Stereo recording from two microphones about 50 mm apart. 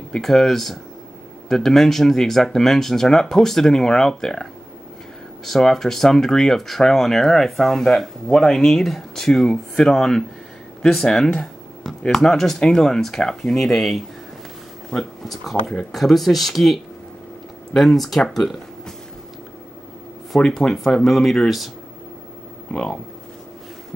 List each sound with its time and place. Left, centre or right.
0.2 s speech: centre
14.9 s speech: centre
15.2 s speech: centre
20.3 s speech: centre
22.7 s speech: centre